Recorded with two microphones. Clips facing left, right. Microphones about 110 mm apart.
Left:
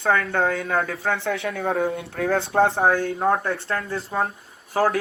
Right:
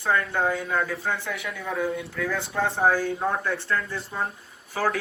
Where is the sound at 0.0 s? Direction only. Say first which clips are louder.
Left 3 dB; 70° left (ahead or behind).